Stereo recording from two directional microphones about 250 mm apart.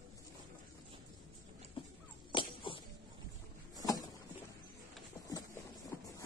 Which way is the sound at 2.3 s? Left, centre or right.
Centre.